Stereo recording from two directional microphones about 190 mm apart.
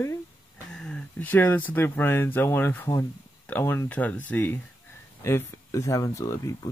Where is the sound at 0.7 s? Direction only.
5° left (ahead or behind).